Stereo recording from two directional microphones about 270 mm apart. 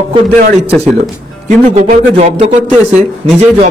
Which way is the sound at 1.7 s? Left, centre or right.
Right.